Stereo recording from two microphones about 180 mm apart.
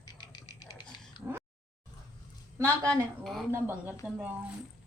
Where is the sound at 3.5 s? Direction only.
10° right (ahead or behind).